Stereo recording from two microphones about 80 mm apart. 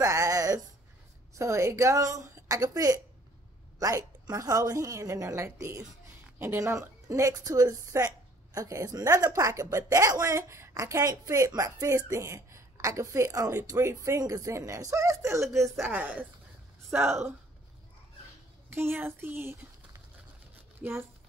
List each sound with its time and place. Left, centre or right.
0.0 s a sound: right
1.3 s a woman's voice: right
13.3 s a woman's voice: right
15.9 s speech: right
18.7 s speech: right